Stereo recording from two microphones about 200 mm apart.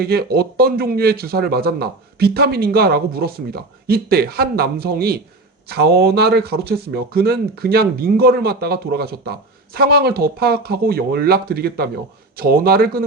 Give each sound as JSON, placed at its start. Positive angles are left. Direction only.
{"t": 0.0, "sound": "speech", "side_deg": -50}